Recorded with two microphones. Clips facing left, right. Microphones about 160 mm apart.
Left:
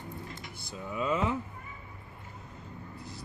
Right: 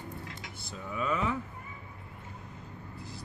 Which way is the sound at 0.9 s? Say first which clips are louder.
Left 2 dB; 20° left (ahead or behind).